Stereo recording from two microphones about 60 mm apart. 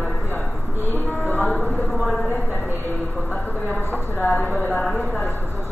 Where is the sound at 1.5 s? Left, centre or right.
Left.